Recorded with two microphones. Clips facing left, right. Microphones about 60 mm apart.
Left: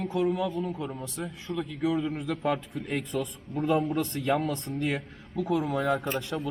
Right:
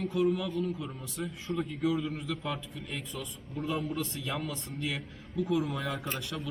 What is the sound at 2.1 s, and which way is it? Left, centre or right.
A man's voice, left.